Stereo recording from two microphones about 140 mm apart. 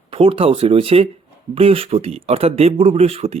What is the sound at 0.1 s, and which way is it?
Speech, 40° right (ahead or behind).